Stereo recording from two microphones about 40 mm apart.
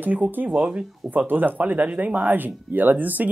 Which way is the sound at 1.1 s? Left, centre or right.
Right.